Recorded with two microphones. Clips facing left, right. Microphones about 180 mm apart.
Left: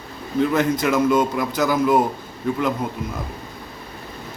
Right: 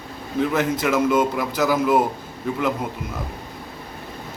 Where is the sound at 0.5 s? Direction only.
5° right (ahead or behind).